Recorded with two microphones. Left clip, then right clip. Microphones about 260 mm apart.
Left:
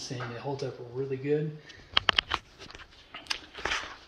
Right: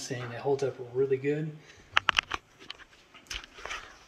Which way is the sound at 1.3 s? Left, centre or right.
Centre.